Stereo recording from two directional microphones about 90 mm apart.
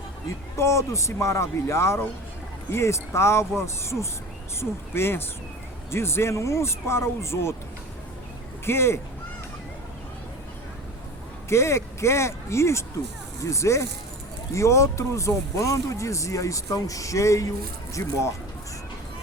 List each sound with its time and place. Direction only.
0.3 s speech: 30° left (ahead or behind)
8.6 s speech: 30° left (ahead or behind)
11.4 s speech: 30° left (ahead or behind)